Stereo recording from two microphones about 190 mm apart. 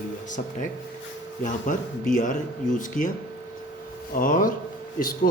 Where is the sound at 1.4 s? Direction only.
45° left (ahead or behind).